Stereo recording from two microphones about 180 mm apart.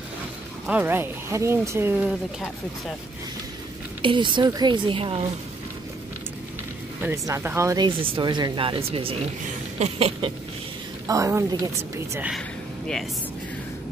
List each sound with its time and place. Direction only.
0.7 s speech: 10° right (ahead or behind)
4.0 s speech: 30° right (ahead or behind)
7.0 s speech: 15° right (ahead or behind); by 8.8 s 30° right (ahead or behind)
9.8 s a sound: 35° right (ahead or behind)
11.1 s speech: 15° right (ahead or behind)
12.2 s a sound: centre (ahead or behind)